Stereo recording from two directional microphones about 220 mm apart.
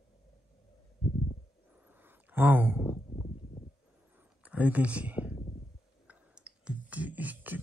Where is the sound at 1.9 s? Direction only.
10° right (ahead or behind).